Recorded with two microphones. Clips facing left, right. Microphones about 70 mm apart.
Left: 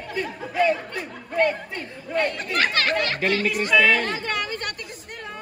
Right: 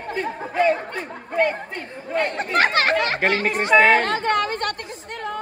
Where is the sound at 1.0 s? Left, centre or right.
Centre.